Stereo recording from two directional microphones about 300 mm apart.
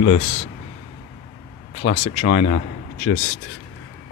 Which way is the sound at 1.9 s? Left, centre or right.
Left.